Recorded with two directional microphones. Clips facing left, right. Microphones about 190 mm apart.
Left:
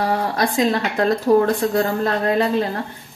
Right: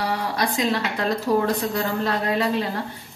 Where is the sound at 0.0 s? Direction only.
45° left (ahead or behind).